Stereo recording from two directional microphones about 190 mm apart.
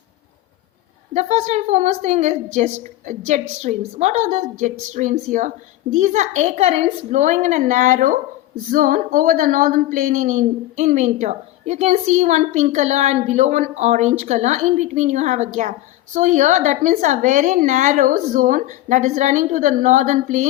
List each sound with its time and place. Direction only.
1.1 s a woman's voice: 35° right (ahead or behind)